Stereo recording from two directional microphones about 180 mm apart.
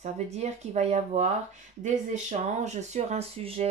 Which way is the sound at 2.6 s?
40° right (ahead or behind).